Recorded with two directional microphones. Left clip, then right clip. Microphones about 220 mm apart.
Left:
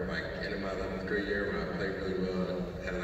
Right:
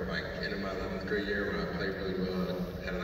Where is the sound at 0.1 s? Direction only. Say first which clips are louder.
Even; 50° left (ahead or behind).